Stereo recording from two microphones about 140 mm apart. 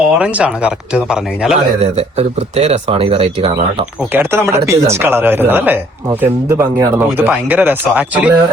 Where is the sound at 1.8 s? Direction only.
50° right (ahead or behind).